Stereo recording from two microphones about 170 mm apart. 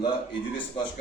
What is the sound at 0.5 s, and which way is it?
Speech, 30° left (ahead or behind).